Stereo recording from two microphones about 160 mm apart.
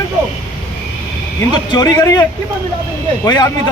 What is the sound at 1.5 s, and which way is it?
Speech, 25° left (ahead or behind).